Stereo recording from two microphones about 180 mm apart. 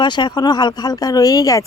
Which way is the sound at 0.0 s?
25° left (ahead or behind).